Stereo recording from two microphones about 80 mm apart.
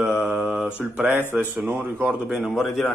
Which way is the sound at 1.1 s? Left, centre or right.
Right.